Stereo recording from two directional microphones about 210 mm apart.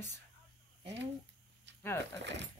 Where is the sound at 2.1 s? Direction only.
55° right (ahead or behind).